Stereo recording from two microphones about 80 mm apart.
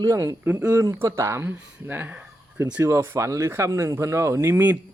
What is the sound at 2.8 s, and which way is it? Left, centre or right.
Speech, right.